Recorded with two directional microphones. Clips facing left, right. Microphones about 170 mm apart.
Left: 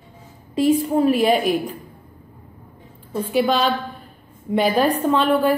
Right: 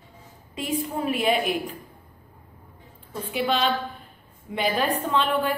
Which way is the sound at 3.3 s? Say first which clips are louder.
Left 5 dB; 40° left (ahead or behind).